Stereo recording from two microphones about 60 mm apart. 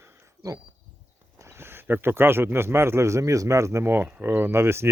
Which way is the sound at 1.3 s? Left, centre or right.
Right.